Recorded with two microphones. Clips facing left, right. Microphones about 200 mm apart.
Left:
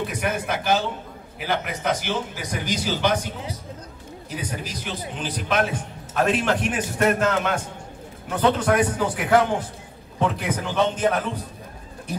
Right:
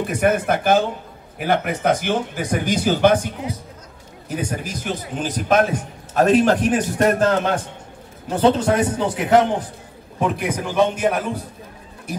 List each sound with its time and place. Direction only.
0.0 s speech: 50° right (ahead or behind)
4.3 s a man's voice: 50° right (ahead or behind); by 11.2 s 10° right (ahead or behind)